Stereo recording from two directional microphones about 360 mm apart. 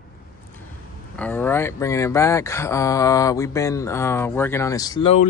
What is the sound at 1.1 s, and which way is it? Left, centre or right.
Speech, centre.